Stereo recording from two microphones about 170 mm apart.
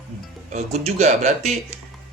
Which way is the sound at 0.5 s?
40° right (ahead or behind).